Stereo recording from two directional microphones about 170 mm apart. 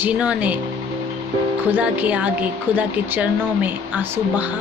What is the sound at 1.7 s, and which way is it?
A woman's voice, 10° right (ahead or behind).